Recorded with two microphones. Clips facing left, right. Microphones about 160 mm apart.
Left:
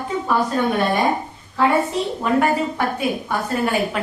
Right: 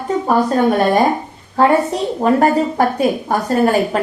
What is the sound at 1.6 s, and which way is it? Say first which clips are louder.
A woman's voice: right 4 dB; 40° right (ahead or behind).